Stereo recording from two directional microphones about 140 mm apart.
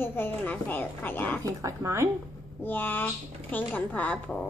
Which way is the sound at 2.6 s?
15° left (ahead or behind).